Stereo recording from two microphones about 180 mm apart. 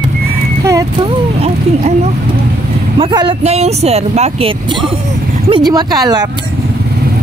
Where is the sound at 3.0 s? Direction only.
25° right (ahead or behind).